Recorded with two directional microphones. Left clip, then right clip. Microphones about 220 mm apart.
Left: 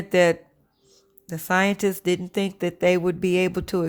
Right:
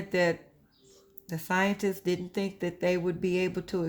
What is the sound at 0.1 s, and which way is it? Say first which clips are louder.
Speech: left 9 dB; 35° left (ahead or behind).